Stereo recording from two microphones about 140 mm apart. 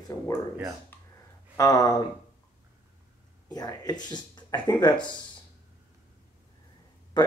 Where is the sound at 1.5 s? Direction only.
25° left (ahead or behind).